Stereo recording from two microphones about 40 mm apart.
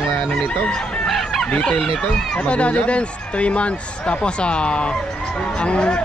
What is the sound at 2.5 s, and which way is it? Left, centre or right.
Speech, left.